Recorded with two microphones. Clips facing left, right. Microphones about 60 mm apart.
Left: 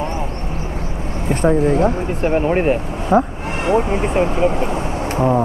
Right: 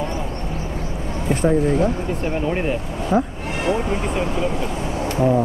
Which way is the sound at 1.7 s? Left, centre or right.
Left.